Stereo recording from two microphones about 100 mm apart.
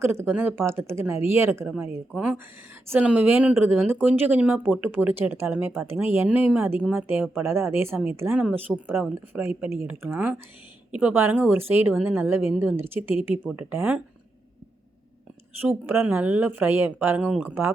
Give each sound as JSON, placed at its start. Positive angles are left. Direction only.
{"t": 0.0, "sound": "speech", "side_deg": -25}
{"t": 2.9, "sound": "speech", "side_deg": -15}
{"t": 15.6, "sound": "speech", "side_deg": -20}